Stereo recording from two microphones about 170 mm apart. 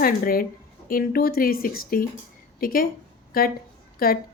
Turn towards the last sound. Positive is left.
turn(degrees=60)  # may be behind; listen again after turning